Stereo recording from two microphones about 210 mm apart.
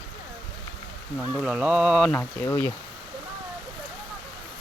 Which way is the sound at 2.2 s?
10° left (ahead or behind).